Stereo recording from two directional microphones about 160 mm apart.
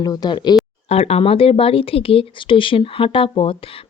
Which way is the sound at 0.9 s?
40° left (ahead or behind).